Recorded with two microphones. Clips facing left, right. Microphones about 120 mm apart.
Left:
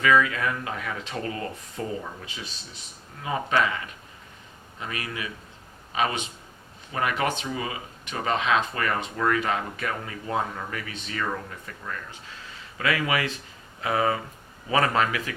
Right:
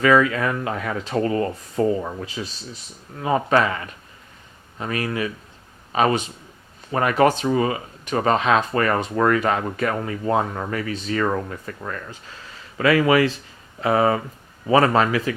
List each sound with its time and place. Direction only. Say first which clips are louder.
0.0 s speech: right 5 dB; 40° right (ahead or behind)
4.8 s speech: right 9 dB; 45° right (ahead or behind)
12.8 s speech: right 9 dB; 40° right (ahead or behind)